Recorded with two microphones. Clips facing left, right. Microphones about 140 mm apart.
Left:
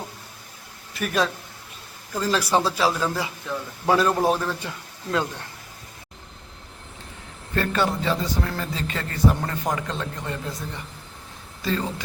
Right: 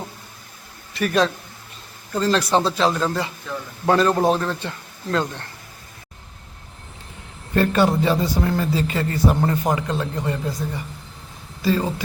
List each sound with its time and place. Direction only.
0.9 s a man's voice: centre (ahead or behind)
7.5 s a man's voice: 20° right (ahead or behind)
9.3 s a man's voice: 30° right (ahead or behind)
9.7 s a man's voice: 10° right (ahead or behind)
11.6 s a man's voice: 10° right (ahead or behind)